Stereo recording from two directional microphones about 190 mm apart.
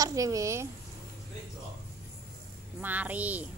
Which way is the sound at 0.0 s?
20° right (ahead or behind).